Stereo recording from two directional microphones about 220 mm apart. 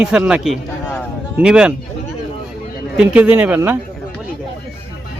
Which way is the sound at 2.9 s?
5° right (ahead or behind).